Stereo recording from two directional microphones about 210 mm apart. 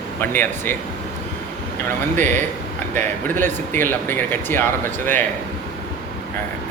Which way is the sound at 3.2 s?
10° left (ahead or behind).